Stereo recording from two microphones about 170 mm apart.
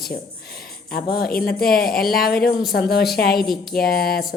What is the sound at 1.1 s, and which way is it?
Speech, 65° left (ahead or behind).